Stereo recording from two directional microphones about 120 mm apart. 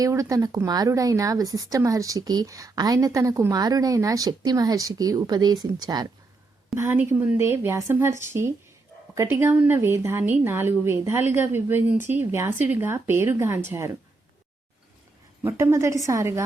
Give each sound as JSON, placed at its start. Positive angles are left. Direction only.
{"t": 0.0, "sound": "speech", "side_deg": -25}
{"t": 6.7, "sound": "speech", "side_deg": -15}
{"t": 15.4, "sound": "speech", "side_deg": -20}